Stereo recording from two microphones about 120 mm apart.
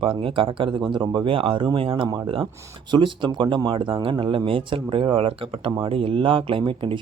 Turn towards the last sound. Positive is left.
turn(degrees=-45)  # may be behind; listen again after turning